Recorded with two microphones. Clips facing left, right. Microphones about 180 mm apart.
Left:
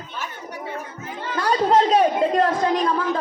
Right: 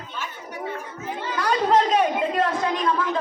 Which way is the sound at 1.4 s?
30° left (ahead or behind).